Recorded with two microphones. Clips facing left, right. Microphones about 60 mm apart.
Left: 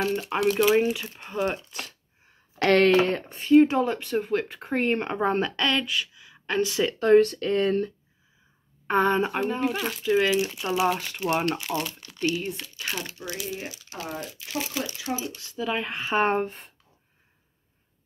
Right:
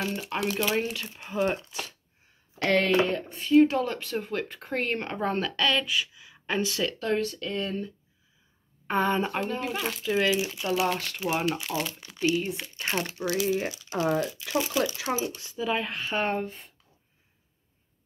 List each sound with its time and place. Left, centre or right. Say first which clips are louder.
0.0 s speech: left 5 dB; centre
2.6 s speech: left 4 dB; left
3.3 s speech: left 3 dB; left
3.6 s speech: left 2 dB; centre
5.9 s a sound: even; centre
6.9 s speech: left 9 dB; left
7.2 s speech: left 10 dB; left
8.8 s speech: left 3 dB; centre
12.8 s speech: right 3 dB; right
13.2 s speech: right 7 dB; right
15.2 s speech: right 2 dB; right
15.5 s speech: left 1 dB; centre
15.9 s speech: left 5 dB; left